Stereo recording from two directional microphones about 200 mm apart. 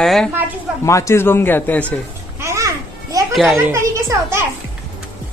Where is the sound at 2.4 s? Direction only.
15° right (ahead or behind).